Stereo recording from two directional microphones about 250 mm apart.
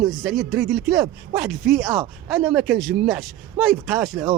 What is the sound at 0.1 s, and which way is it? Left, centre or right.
Speech, centre.